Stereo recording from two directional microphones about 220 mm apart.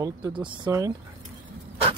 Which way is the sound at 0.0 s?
20° right (ahead or behind).